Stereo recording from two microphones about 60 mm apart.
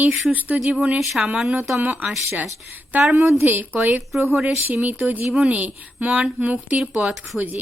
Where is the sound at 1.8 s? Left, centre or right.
Right.